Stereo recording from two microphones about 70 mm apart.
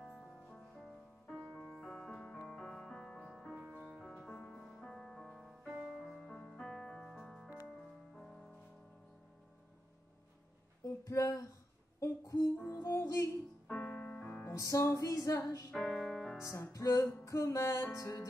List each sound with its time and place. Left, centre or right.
0.0 s music: centre
1.2 s music: centre
4.6 s music: centre
10.9 s music: left
12.0 s a sound: left
12.7 s music: left
13.7 s piano: left
14.4 s music: left
15.7 s music: centre
16.4 s music: left